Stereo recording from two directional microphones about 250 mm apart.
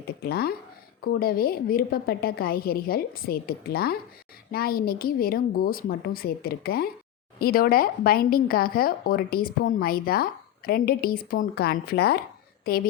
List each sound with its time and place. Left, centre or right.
0.2 s speech: left